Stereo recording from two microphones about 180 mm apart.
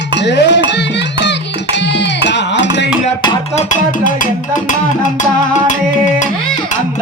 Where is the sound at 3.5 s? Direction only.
45° left (ahead or behind).